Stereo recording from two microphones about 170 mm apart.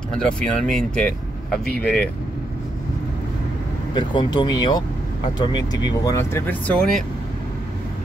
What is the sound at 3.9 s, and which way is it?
Speech, 25° left (ahead or behind).